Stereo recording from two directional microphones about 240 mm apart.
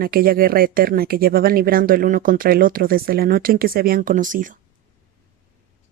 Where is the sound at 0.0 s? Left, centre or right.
Right.